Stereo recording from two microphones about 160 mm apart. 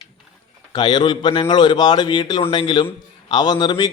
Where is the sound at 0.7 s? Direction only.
30° left (ahead or behind).